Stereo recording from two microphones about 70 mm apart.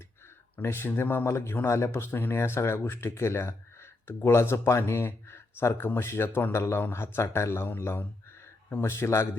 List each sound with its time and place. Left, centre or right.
0.5 s speech: left
1.2 s speech: left